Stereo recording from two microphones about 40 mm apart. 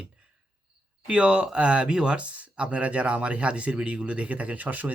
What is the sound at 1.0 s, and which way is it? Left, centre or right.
Speech, right.